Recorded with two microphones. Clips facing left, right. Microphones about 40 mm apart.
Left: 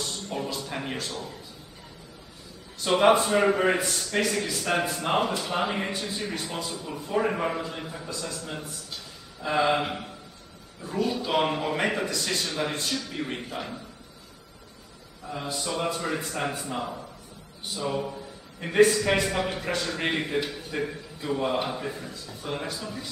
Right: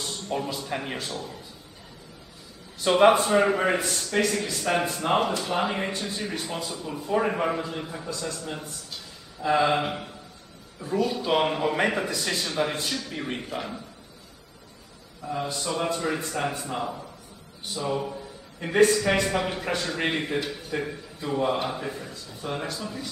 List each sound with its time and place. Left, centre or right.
0.0 s music: centre
0.7 s speech: centre
2.8 s a man's voice: centre
15.2 s a man's voice: centre